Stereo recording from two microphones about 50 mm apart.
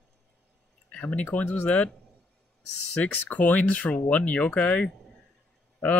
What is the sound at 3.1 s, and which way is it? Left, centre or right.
Speech, left.